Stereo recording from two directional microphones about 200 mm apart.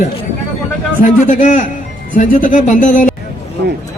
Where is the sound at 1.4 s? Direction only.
40° left (ahead or behind).